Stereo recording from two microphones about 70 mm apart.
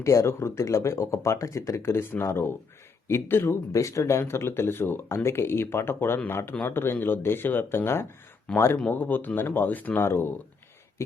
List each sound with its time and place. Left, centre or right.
0.0 s speech: left
3.4 s speech: left
10.1 s speech: left